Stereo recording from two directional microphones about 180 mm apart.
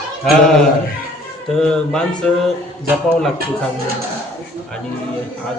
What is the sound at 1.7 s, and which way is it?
Speech, 5° left (ahead or behind).